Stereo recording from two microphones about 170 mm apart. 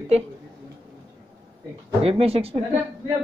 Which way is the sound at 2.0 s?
35° right (ahead or behind).